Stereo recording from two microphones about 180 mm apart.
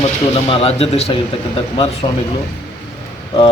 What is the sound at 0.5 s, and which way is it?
Speech, 35° left (ahead or behind).